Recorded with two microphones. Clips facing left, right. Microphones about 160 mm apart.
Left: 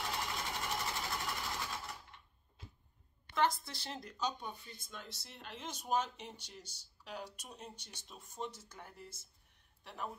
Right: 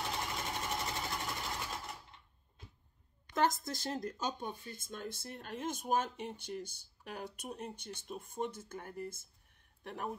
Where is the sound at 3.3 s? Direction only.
45° right (ahead or behind).